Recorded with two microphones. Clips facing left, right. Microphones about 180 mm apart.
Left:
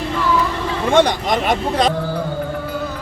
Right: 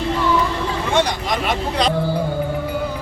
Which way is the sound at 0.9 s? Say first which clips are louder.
Left 6 dB; 50° left (ahead or behind).